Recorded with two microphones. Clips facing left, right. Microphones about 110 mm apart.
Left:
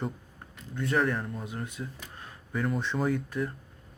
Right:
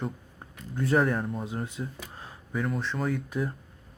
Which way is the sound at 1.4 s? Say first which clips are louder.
Right 3 dB; 30° right (ahead or behind).